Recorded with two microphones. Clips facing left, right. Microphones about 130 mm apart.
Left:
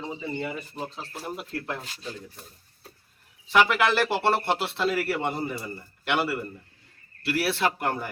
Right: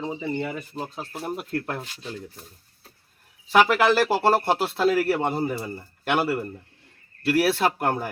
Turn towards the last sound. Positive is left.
turn(degrees=-45)  # may be behind; listen again after turning